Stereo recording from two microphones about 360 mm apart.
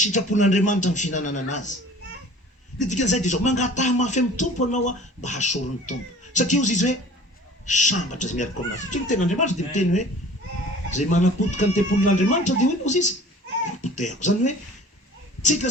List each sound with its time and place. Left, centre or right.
0.0 s speech: centre
2.7 s speech: centre